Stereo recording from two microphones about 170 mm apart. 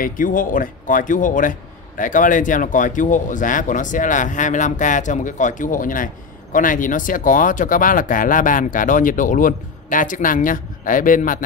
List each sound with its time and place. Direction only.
0.0 s a man's voice: 55° left (ahead or behind)